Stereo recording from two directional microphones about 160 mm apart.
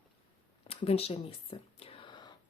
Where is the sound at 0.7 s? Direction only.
40° left (ahead or behind).